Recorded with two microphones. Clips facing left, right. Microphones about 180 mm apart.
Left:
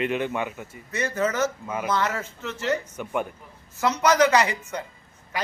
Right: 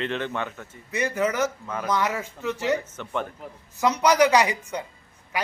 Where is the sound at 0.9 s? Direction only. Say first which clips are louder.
Right 1 dB; 15° right (ahead or behind).